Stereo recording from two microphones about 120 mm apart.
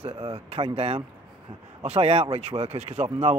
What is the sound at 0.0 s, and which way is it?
Speech, 55° right (ahead or behind).